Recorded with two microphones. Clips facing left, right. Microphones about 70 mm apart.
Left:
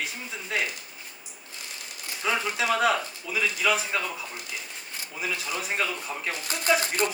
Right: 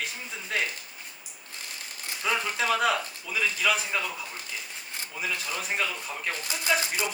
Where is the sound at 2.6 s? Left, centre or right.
Centre.